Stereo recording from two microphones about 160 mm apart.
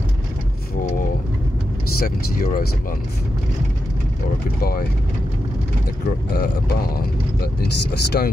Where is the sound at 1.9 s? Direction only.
65° left (ahead or behind).